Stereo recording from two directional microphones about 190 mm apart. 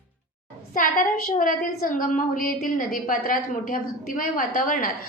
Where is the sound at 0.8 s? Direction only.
45° left (ahead or behind).